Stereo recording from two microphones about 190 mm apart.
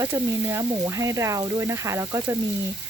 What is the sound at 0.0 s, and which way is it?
Speech, 15° right (ahead or behind).